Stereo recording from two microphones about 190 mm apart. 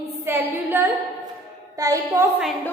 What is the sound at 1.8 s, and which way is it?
Speech, 15° right (ahead or behind).